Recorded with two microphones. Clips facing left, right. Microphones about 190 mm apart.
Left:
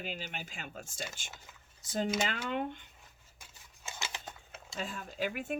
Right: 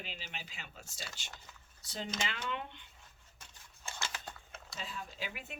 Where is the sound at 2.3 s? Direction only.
45° left (ahead or behind).